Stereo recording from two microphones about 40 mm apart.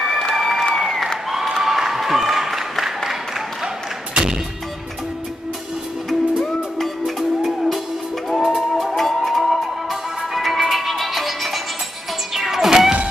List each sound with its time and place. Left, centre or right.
0.0 s applause: centre
4.1 s music: centre
7.1 s music: centre